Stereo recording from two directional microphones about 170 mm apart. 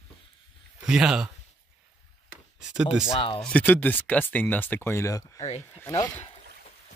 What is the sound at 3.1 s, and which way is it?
Speech, 30° left (ahead or behind).